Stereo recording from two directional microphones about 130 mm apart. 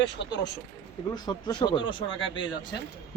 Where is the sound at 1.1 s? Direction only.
35° left (ahead or behind).